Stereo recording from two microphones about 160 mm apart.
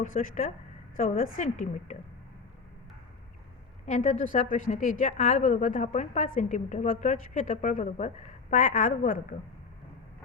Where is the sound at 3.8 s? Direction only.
50° left (ahead or behind).